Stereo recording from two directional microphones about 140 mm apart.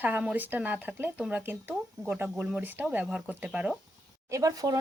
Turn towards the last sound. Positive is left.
turn(degrees=-25)  # may be behind; listen again after turning